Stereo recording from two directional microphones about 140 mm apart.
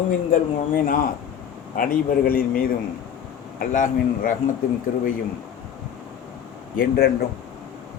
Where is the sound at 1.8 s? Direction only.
90° left; by 4.3 s 70° left (ahead or behind).